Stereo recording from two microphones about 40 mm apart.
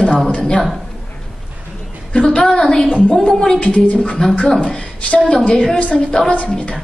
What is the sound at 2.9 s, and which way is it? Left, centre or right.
Speech, left.